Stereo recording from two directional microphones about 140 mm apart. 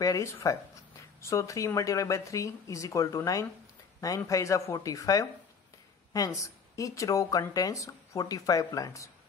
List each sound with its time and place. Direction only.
0.0 s speech: 20° left (ahead or behind)